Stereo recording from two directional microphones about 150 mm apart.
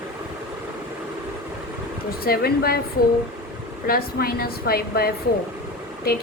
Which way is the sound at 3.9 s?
90° left.